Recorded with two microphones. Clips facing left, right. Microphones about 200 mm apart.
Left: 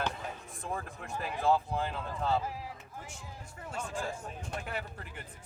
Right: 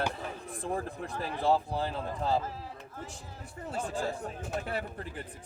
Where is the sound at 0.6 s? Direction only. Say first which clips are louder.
Right 5 dB; 35° right (ahead or behind).